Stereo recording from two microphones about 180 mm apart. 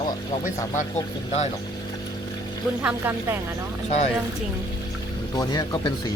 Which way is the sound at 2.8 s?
10° right (ahead or behind).